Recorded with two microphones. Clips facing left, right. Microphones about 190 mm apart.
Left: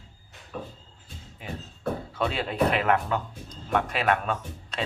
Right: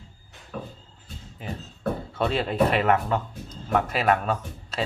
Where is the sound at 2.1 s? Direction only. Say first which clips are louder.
Right 4 dB; centre (ahead or behind).